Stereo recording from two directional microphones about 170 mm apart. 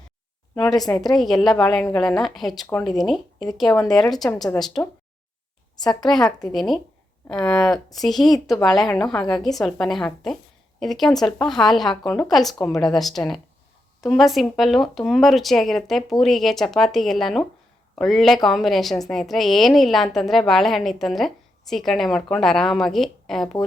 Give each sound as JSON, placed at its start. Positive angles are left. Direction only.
{"t": 1.0, "sound": "a woman's voice", "side_deg": 0}
{"t": 3.7, "sound": "speech", "side_deg": 20}
{"t": 3.9, "sound": "a woman's voice", "side_deg": 0}
{"t": 6.0, "sound": "a woman's voice", "side_deg": 0}